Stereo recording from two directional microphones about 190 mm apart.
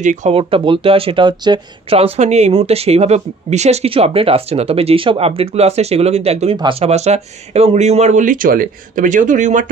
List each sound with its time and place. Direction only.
0.0 s speech: 40° right (ahead or behind)